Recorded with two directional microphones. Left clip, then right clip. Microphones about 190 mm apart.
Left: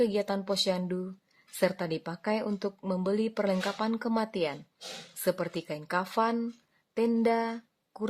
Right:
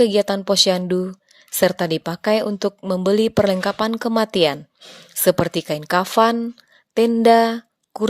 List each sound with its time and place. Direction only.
0.0 s speech: 35° right (ahead or behind)